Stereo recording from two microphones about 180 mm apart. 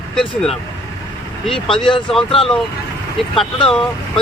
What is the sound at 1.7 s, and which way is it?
Speech, 30° left (ahead or behind).